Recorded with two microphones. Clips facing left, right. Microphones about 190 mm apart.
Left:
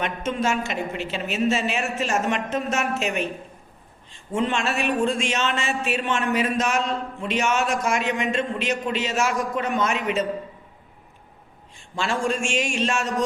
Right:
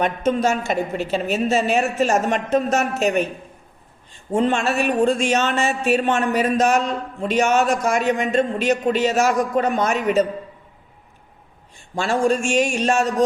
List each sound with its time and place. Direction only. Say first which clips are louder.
0.0 s speech: right 6 dB; 35° right (ahead or behind)
4.3 s speech: right 5 dB; 40° right (ahead or behind)
11.9 s speech: right 5 dB; 40° right (ahead or behind)